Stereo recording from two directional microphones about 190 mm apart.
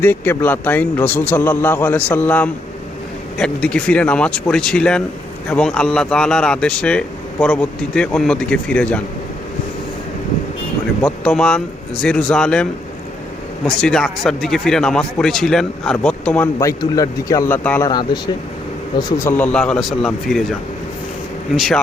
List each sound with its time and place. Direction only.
0.0 s a man's voice: 10° left (ahead or behind)
11.0 s speech: 5° left (ahead or behind)
13.7 s a man's voice: 5° left (ahead or behind)
17.8 s speech: 20° left (ahead or behind); by 20.5 s centre (ahead or behind)
21.5 s speech: centre (ahead or behind)